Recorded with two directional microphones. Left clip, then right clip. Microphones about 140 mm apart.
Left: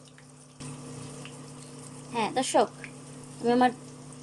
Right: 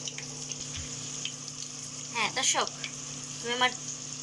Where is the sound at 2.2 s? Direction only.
55° left (ahead or behind).